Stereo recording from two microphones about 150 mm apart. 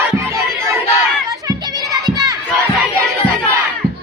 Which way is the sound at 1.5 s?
25° right (ahead or behind).